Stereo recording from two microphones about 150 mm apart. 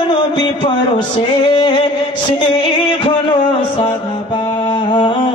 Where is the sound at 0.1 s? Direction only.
30° left (ahead or behind).